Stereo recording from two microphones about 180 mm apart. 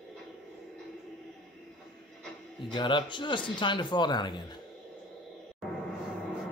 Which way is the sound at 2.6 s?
25° left (ahead or behind).